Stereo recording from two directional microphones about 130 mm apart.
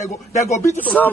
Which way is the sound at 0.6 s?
20° left (ahead or behind).